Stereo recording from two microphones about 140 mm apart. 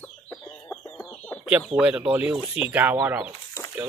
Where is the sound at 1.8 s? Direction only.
10° right (ahead or behind).